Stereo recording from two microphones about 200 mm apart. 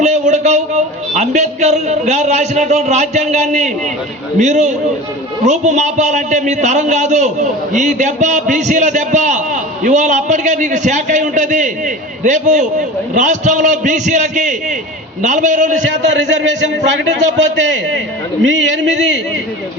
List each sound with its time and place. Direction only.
0.0 s a man's voice: 35° right (ahead or behind)
15.9 s a man's voice: 65° right (ahead or behind)